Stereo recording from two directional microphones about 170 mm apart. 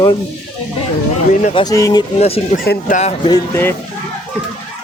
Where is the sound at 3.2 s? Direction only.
20° left (ahead or behind).